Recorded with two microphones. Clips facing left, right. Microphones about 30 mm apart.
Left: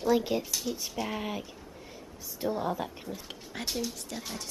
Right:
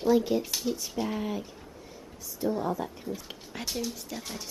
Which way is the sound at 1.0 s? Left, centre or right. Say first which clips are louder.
Right 1 dB; centre.